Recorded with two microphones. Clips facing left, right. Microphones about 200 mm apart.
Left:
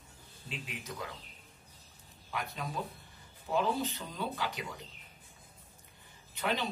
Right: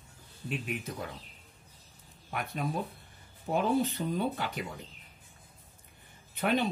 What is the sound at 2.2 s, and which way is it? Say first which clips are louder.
Speech: right 5 dB; 55° right (ahead or behind).